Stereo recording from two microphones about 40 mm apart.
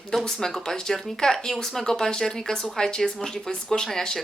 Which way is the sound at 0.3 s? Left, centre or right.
Centre.